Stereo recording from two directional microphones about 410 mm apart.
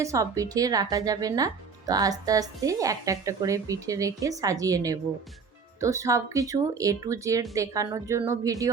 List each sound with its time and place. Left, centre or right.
0.0 s a woman's voice: centre